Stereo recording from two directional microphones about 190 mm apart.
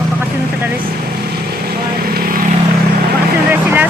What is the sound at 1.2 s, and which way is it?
Vehicle, 55° right (ahead or behind).